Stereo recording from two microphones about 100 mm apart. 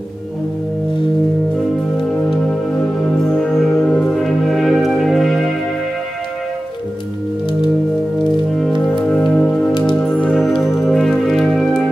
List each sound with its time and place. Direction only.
3.3 s music: 5° left (ahead or behind)
9.0 s music: 10° left (ahead or behind)
10.3 s music: centre (ahead or behind)